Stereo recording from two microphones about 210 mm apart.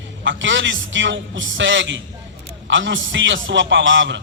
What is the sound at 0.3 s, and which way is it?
A man's voice, 60° right (ahead or behind).